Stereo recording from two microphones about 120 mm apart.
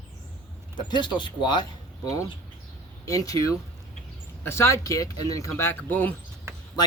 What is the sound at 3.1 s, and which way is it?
Speech, 30° left (ahead or behind).